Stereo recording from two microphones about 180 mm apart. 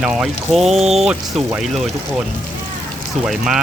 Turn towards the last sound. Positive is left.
turn(degrees=-5)  # may be behind; listen again after turning